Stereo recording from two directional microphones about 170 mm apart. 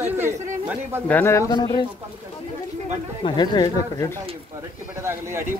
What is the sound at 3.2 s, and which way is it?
Speech, 25° left (ahead or behind).